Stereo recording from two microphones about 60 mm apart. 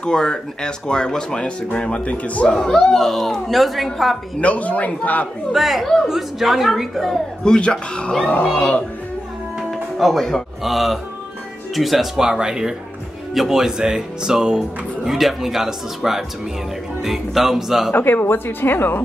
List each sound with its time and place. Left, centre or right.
0.0 s a man's voice: centre
2.5 s a woman's voice: centre
4.4 s a man's voice: left
5.5 s a woman's voice: centre
7.4 s speech: centre
8.3 s a man's voice: left
9.9 s a woman's voice: centre
17.9 s speech: left